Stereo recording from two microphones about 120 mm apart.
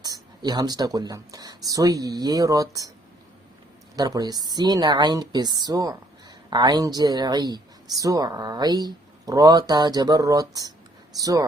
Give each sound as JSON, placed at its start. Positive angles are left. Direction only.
{"t": 0.0, "sound": "speech", "side_deg": -35}
{"t": 3.9, "sound": "speech", "side_deg": -30}